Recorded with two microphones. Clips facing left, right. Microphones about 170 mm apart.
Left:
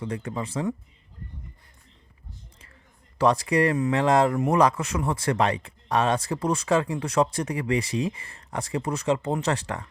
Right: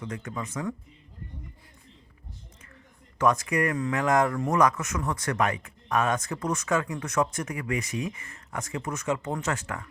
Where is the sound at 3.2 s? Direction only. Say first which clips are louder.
Left 3 dB; 35° left (ahead or behind).